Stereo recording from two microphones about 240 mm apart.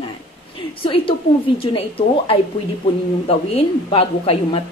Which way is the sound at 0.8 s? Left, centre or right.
Left.